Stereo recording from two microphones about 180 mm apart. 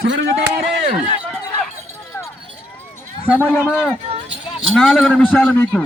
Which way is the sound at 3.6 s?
5° right (ahead or behind).